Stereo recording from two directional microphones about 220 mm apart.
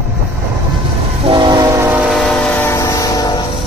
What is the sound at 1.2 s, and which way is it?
Train, 20° right (ahead or behind).